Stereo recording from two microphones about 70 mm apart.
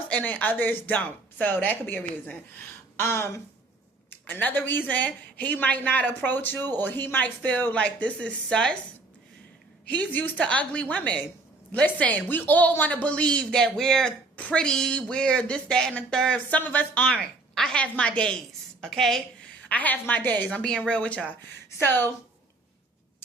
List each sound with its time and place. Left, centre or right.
0.1 s speech: left
3.0 s speech: left
4.1 s speech: left
9.8 s speech: left
16.6 s speech: left
17.2 s speech: centre
18.8 s a woman's voice: centre
19.6 s speech: left
21.8 s speech: left